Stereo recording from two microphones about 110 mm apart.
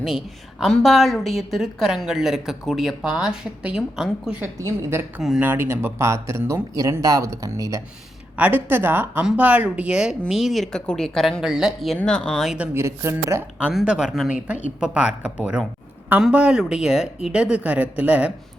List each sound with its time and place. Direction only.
0.6 s a woman's voice: centre (ahead or behind)
4.5 s speech: 25° right (ahead or behind)
8.4 s a woman's voice: 15° right (ahead or behind)
11.9 s speech: 10° left (ahead or behind)
12.5 s speech: 25° right (ahead or behind)
13.6 s speech: 10° right (ahead or behind)